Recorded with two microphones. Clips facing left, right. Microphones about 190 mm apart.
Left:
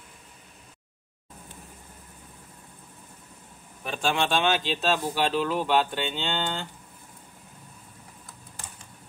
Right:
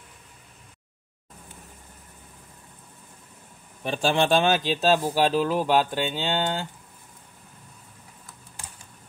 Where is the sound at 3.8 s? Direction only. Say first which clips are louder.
Right 4 dB; 35° right (ahead or behind).